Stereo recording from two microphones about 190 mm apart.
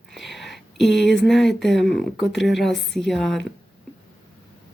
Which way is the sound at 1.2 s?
Centre (ahead or behind).